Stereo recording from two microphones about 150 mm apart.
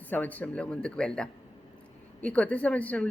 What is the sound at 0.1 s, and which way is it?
A man's voice, 10° left (ahead or behind).